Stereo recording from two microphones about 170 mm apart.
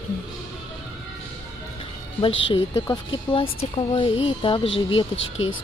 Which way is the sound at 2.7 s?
20° left (ahead or behind).